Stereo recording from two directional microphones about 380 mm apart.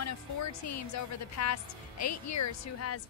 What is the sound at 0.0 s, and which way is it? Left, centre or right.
A woman's voice, left.